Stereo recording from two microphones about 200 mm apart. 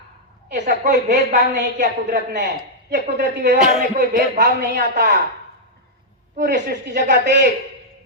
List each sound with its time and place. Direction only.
0.6 s speech: 50° right (ahead or behind)
6.4 s speech: 55° right (ahead or behind)